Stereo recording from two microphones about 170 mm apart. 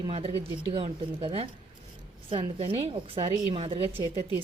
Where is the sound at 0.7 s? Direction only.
30° right (ahead or behind).